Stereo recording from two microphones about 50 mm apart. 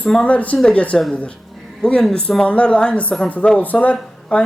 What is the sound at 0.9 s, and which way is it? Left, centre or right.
Speech, centre.